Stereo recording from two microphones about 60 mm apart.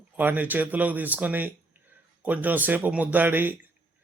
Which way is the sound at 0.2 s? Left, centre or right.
Right.